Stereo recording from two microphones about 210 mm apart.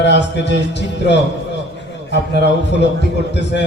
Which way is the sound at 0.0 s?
55° left (ahead or behind).